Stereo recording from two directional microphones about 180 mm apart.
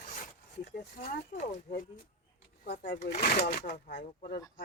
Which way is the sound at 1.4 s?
40° left (ahead or behind).